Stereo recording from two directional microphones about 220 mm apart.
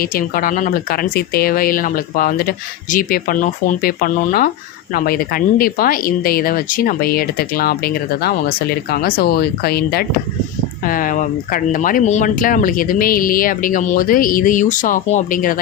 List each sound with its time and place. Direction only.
0.0 s speech: 40° left (ahead or behind)